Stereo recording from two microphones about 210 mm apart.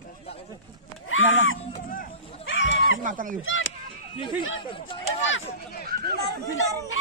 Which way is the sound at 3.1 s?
40° right (ahead or behind).